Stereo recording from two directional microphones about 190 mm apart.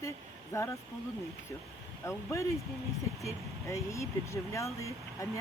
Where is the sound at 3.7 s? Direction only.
15° left (ahead or behind).